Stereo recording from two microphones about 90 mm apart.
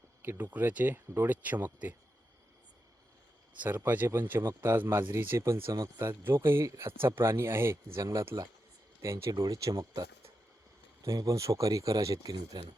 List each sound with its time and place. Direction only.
0.2 s speech: 20° right (ahead or behind)
3.6 s speech: 20° right (ahead or behind); by 6.1 s 40° right (ahead or behind)
6.2 s speech: 25° right (ahead or behind)
8.3 s speech: 45° right (ahead or behind)
9.0 s speech: 30° right (ahead or behind)
11.0 s speech: 35° right (ahead or behind)